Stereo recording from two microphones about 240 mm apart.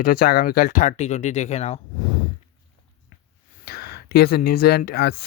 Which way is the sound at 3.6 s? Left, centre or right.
Left.